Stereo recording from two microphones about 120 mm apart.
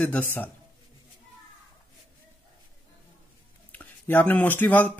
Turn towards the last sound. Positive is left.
turn(degrees=15)  # may be behind; listen again after turning